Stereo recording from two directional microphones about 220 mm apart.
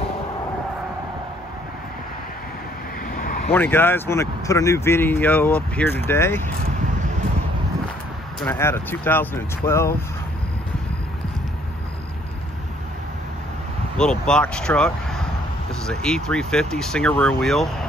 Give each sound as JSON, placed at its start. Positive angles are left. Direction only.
{"t": 3.2, "sound": "vehicle", "side_deg": 40}
{"t": 3.5, "sound": "speech", "side_deg": 10}
{"t": 8.4, "sound": "speech", "side_deg": 10}
{"t": 13.9, "sound": "speech", "side_deg": 5}